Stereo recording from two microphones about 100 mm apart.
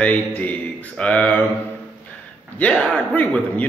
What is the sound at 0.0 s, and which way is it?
Speech, 15° left (ahead or behind).